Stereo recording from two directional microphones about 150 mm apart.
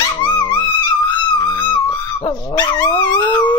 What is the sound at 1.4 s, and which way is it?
Dog, 30° left (ahead or behind).